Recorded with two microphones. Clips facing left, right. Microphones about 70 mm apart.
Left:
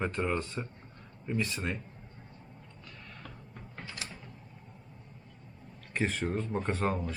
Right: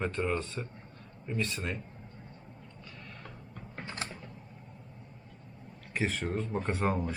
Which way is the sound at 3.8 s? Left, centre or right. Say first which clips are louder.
Right 4 dB; right.